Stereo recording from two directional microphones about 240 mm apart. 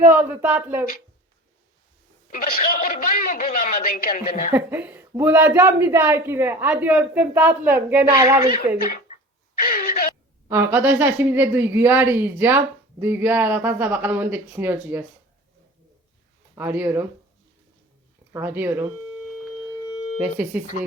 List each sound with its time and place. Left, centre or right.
0.1 s speech: centre
2.3 s a man's voice: left
4.5 s speech: centre
9.6 s a sound: left
10.5 s speech: centre
16.6 s speech: centre
18.3 s speech: centre
19.8 s a sound: left